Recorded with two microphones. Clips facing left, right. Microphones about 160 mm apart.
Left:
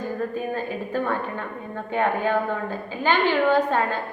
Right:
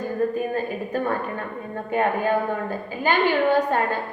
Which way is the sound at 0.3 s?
15° right (ahead or behind).